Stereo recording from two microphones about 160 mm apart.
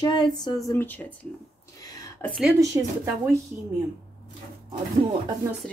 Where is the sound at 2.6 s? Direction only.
20° right (ahead or behind).